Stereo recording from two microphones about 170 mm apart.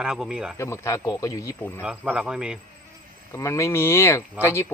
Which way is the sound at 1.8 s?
5° right (ahead or behind).